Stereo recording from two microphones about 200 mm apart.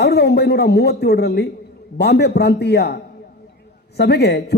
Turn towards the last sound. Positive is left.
turn(degrees=55)  # may be behind; listen again after turning